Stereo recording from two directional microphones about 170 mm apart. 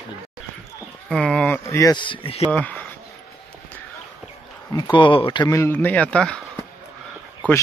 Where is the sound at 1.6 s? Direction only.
20° left (ahead or behind).